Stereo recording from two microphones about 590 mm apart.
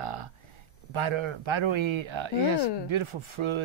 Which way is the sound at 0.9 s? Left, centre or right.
Right.